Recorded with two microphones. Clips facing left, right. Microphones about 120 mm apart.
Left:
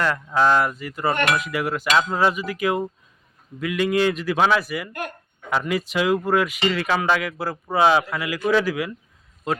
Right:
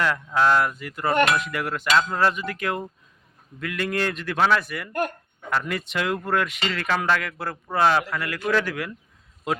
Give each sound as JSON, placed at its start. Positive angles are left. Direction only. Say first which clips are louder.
{"t": 0.3, "sound": "speech", "louder": "left 2 dB", "side_deg": 10}